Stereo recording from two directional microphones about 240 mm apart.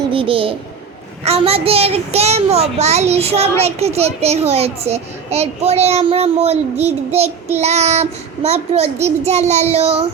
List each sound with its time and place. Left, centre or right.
0.1 s a woman's voice: right